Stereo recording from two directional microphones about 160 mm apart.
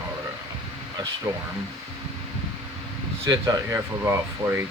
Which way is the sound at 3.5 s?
20° right (ahead or behind).